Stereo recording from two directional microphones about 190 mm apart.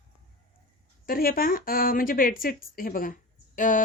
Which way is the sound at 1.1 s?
50° left (ahead or behind).